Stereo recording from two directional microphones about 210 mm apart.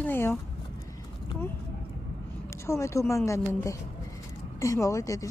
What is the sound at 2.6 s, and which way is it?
Speech, 15° left (ahead or behind).